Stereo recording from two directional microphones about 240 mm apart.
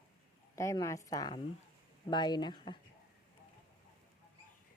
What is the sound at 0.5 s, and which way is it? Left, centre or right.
Speech, centre.